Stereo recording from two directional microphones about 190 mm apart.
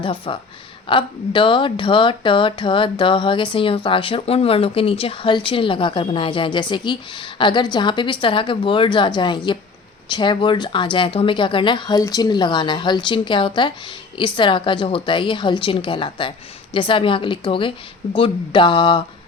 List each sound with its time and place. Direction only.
0.0 s speech: 25° left (ahead or behind)